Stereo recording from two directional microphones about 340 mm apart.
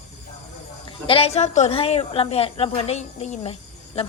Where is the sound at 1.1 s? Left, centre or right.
Centre.